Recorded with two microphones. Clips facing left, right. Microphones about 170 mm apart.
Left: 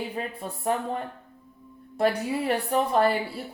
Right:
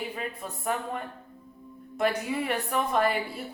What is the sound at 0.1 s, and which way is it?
A woman's voice, 35° left (ahead or behind).